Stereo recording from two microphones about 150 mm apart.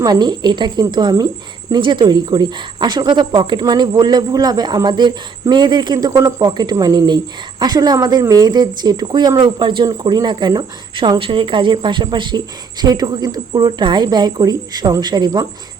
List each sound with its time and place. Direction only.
0.0 s a woman's voice: 25° right (ahead or behind)